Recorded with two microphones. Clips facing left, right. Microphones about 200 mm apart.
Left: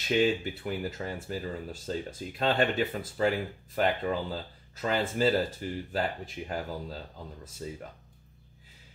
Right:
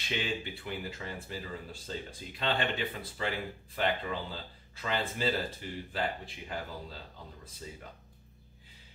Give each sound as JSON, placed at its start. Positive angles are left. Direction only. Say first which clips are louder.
{"t": 0.1, "sound": "speech", "louder": "left 10 dB", "side_deg": 45}